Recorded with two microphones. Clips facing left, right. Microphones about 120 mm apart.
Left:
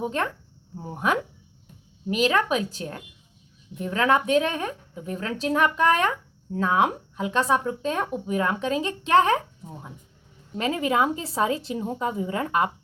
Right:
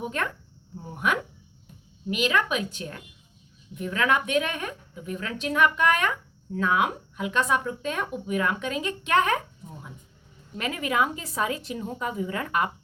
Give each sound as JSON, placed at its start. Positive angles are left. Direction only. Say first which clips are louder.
{"t": 0.0, "sound": "a woman's voice", "louder": "left 3 dB", "side_deg": 30}